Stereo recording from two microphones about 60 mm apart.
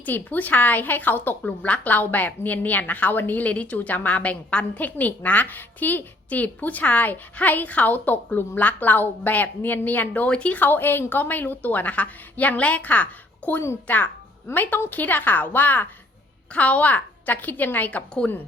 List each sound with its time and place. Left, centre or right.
0.0 s a woman's voice: left
10.6 s a woman's voice: left
18.2 s speech: centre